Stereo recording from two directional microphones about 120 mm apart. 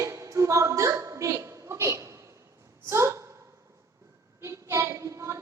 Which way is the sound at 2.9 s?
25° right (ahead or behind).